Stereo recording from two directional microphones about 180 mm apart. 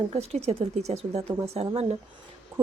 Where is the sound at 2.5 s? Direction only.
20° right (ahead or behind).